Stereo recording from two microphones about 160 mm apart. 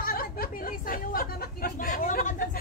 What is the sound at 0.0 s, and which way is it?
Speech, 65° left (ahead or behind).